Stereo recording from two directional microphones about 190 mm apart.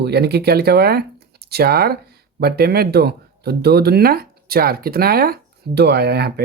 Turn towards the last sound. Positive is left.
turn(degrees=-55)  # may be behind; listen again after turning